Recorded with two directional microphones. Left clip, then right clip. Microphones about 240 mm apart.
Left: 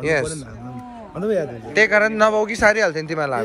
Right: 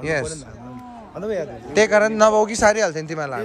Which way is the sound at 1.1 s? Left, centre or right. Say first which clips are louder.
Left 4 dB; left.